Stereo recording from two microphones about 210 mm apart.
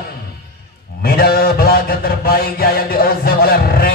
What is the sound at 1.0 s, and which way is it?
Mantra, 45° left (ahead or behind).